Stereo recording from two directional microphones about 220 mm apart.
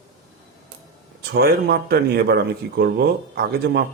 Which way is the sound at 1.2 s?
50° right (ahead or behind).